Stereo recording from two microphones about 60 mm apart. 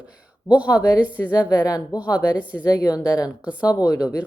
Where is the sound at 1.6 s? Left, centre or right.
Left.